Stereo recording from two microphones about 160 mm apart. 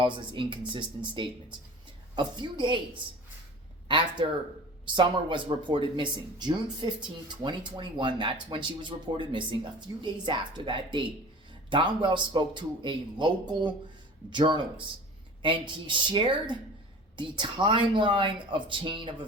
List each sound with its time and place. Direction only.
0.0 s speech: 30° right (ahead or behind)
3.8 s speech: 30° right (ahead or behind)